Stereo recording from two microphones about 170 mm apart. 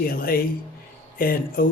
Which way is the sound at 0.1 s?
60° left (ahead or behind).